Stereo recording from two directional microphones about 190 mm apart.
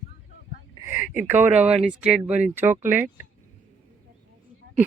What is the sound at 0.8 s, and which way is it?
Speech, 10° right (ahead or behind).